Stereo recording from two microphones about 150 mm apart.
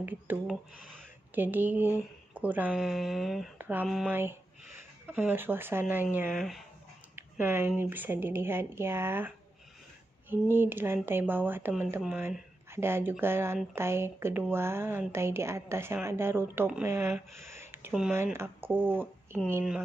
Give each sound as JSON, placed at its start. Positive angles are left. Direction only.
{"t": 0.0, "sound": "speech", "side_deg": -10}
{"t": 2.8, "sound": "mantra", "side_deg": 0}
{"t": 3.5, "sound": "a sound", "side_deg": -10}
{"t": 4.1, "sound": "speech", "side_deg": -15}
{"t": 6.3, "sound": "mantra", "side_deg": 0}
{"t": 7.2, "sound": "speech", "side_deg": -15}
{"t": 10.3, "sound": "speech", "side_deg": -15}
{"t": 17.5, "sound": "a sound", "side_deg": -15}
{"t": 18.1, "sound": "speech", "side_deg": -15}